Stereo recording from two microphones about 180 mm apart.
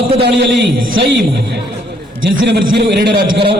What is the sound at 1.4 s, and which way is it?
A man's voice, 65° right (ahead or behind).